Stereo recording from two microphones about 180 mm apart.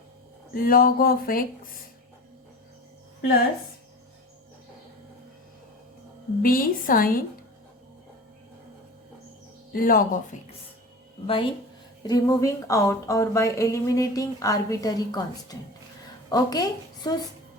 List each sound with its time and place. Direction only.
0.5 s speech: 55° left (ahead or behind)
6.4 s speech: 50° left (ahead or behind)
9.7 s speech: 50° left (ahead or behind)
11.3 s a woman's voice: 30° left (ahead or behind)